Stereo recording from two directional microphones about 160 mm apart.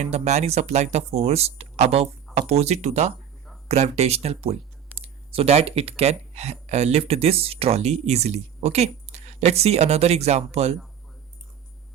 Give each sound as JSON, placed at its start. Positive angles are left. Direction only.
{"t": 0.0, "sound": "speech", "side_deg": -45}